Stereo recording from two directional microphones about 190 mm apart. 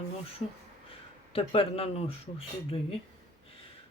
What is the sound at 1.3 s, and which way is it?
Speech, 30° left (ahead or behind).